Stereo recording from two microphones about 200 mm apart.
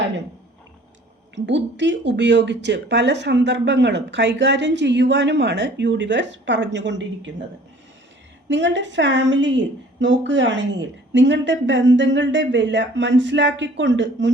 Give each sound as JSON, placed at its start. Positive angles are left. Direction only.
{"t": 1.5, "sound": "speech", "side_deg": -60}
{"t": 8.4, "sound": "speech", "side_deg": -65}